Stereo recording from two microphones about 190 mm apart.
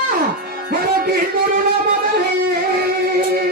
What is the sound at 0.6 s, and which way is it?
Music, 55° right (ahead or behind).